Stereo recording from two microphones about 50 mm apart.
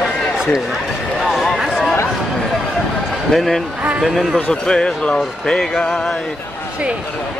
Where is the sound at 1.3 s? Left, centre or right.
Centre.